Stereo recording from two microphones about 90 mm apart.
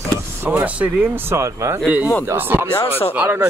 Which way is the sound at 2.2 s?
25° right (ahead or behind).